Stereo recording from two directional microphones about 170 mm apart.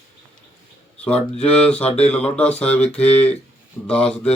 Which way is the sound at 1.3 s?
35° left (ahead or behind).